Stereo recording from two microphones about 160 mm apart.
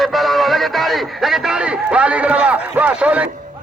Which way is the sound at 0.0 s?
Centre (ahead or behind).